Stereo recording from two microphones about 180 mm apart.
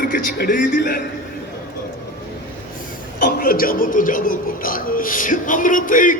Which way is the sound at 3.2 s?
50° left (ahead or behind).